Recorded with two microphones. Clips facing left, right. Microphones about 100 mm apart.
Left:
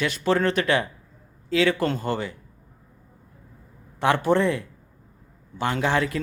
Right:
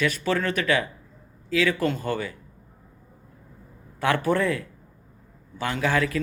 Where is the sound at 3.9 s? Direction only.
20° left (ahead or behind).